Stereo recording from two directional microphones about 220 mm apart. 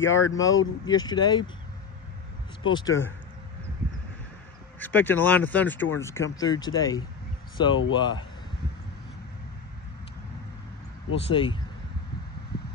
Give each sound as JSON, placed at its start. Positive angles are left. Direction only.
{"t": 0.0, "sound": "speech", "side_deg": 60}
{"t": 0.3, "sound": "speech", "side_deg": 15}
{"t": 2.6, "sound": "speech", "side_deg": 20}
{"t": 4.7, "sound": "speech", "side_deg": 10}
{"t": 11.2, "sound": "speech", "side_deg": 20}